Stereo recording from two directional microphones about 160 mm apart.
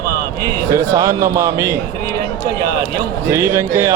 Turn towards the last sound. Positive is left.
turn(degrees=-15)  # may be behind; listen again after turning